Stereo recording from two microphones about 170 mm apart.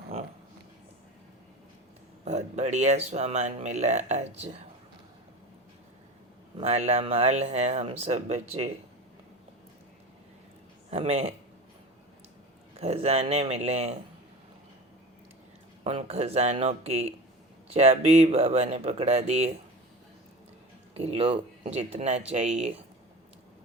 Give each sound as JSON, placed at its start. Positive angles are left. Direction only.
{"t": 2.2, "sound": "speech", "side_deg": -40}
{"t": 6.6, "sound": "speech", "side_deg": -40}
{"t": 10.9, "sound": "speech", "side_deg": -35}
{"t": 12.7, "sound": "speech", "side_deg": -35}
{"t": 15.8, "sound": "speech", "side_deg": -35}
{"t": 20.9, "sound": "speech", "side_deg": -35}